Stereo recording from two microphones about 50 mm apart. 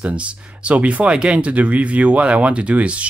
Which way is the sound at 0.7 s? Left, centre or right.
Right.